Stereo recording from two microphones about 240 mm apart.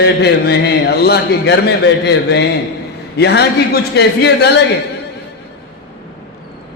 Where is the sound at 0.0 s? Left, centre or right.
Left.